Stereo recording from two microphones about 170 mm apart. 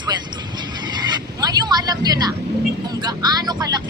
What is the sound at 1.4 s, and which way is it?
A woman's voice, 25° right (ahead or behind).